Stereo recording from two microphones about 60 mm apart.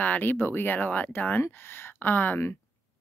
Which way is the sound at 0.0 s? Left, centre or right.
Left.